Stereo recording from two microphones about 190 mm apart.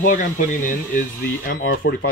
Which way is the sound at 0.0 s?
45° left (ahead or behind).